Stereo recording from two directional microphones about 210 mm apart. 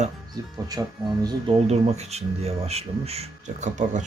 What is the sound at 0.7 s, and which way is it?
Speech, 15° right (ahead or behind).